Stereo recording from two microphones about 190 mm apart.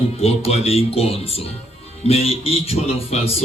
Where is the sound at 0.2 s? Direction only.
30° left (ahead or behind).